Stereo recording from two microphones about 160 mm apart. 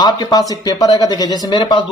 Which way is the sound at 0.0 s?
25° left (ahead or behind).